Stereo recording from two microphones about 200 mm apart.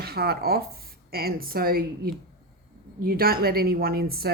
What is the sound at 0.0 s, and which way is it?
Speech, 50° right (ahead or behind).